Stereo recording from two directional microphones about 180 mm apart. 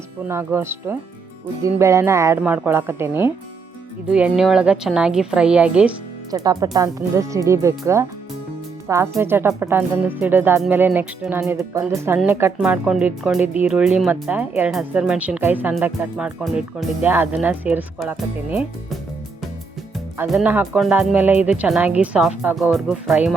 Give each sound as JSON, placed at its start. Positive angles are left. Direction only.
{"t": 0.3, "sound": "a woman's voice", "side_deg": -15}
{"t": 6.3, "sound": "speech", "side_deg": -20}
{"t": 20.2, "sound": "speech", "side_deg": -5}